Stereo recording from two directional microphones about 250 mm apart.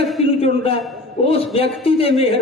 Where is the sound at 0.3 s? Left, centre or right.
Left.